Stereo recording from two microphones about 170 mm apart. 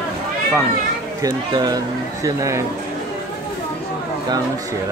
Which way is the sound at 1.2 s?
25° right (ahead or behind).